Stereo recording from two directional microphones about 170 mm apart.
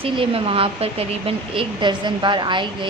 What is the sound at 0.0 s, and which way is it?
Speech, 35° right (ahead or behind).